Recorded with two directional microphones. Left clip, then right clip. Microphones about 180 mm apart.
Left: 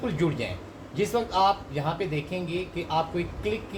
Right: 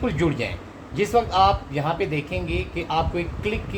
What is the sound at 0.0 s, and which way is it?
Speech, 40° right (ahead or behind).